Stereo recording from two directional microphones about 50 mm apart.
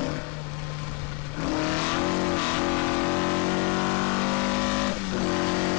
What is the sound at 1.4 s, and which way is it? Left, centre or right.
Vehicle, left.